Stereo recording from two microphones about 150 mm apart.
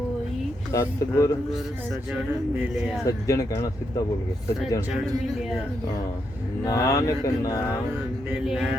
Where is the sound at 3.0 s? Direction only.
25° left (ahead or behind).